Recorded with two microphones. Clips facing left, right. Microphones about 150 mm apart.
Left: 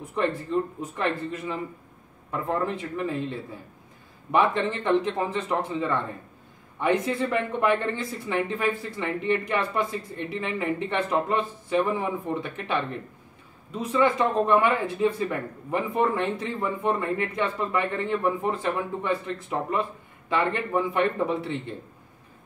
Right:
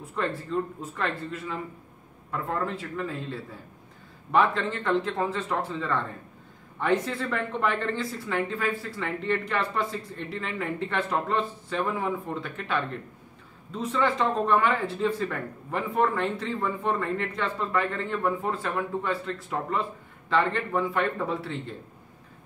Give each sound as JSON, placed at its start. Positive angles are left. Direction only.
{"t": 0.1, "sound": "speech", "side_deg": 20}
{"t": 2.6, "sound": "speech", "side_deg": 20}
{"t": 13.7, "sound": "speech", "side_deg": 15}